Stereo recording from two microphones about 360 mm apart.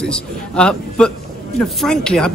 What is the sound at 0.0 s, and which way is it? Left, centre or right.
Speech, centre.